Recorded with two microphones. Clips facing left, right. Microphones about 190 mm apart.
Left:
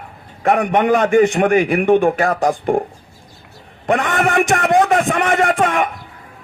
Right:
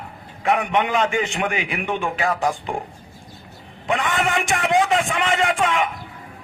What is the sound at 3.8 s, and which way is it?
A man's voice, 50° left (ahead or behind).